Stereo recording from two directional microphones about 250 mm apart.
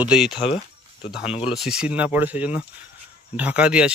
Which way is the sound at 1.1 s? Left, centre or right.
Centre.